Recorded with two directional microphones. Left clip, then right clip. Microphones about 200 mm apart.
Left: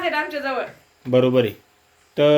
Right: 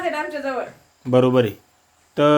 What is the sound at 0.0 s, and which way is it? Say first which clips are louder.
A woman's voice: left 1 dB; centre (ahead or behind).